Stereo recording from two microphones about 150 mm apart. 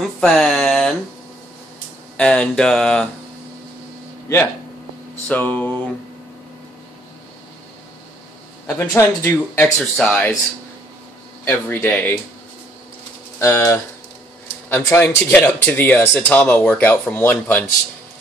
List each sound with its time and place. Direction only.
0.2 s a sound: 5° left (ahead or behind)
2.1 s speech: 5° left (ahead or behind)
5.3 s speech: 10° left (ahead or behind)
8.6 s speech: 15° left (ahead or behind)
11.4 s speech: 15° left (ahead or behind)
13.4 s speech: 15° left (ahead or behind)